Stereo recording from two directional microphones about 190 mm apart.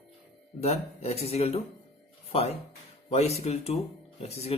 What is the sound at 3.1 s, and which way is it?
Speech, 35° left (ahead or behind).